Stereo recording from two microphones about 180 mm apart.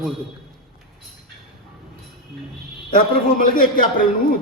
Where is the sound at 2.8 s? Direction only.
50° left (ahead or behind).